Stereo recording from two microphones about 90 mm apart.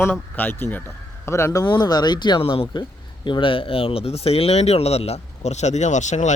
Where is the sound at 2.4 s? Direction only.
90° left.